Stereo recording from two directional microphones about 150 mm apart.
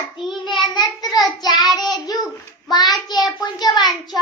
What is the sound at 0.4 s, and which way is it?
Child singing, 30° left (ahead or behind).